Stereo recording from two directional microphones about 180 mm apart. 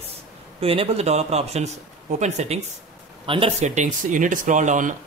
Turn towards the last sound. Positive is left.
turn(degrees=-45)  # may be behind; listen again after turning